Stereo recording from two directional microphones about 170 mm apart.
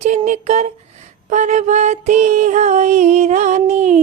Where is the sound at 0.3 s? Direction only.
40° right (ahead or behind).